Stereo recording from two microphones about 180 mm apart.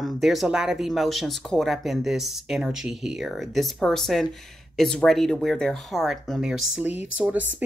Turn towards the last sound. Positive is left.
turn(degrees=-10)  # may be behind; listen again after turning